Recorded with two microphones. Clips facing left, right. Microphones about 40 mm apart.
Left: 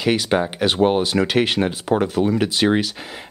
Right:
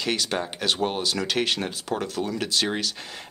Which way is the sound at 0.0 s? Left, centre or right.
Centre.